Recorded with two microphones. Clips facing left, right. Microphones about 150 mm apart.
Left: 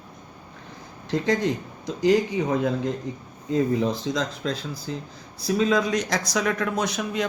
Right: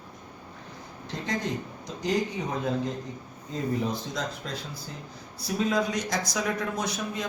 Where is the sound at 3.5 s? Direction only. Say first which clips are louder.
Left 7 dB; 90° left.